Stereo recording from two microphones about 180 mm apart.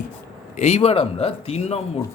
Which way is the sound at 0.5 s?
40° left (ahead or behind).